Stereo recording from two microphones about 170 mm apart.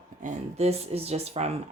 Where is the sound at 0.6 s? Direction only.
35° right (ahead or behind).